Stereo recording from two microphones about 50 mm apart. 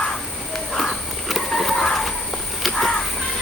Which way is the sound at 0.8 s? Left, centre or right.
Centre.